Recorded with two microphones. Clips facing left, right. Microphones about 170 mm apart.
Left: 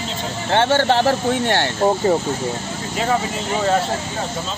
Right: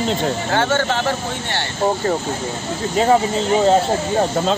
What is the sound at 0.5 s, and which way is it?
Speech, 30° left (ahead or behind).